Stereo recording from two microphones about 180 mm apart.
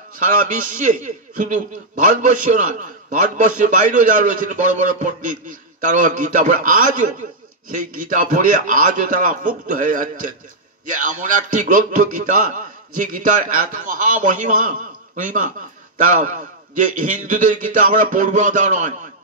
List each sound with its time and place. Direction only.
0.4 s a man's voice: 45° right (ahead or behind)
16.0 s a man's voice: 45° right (ahead or behind)